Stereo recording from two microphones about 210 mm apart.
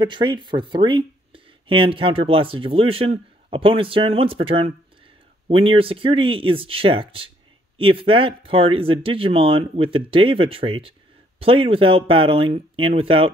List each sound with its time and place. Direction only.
0.0 s speech: 20° right (ahead or behind)